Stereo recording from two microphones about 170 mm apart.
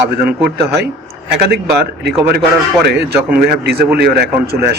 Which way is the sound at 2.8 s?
70° right (ahead or behind).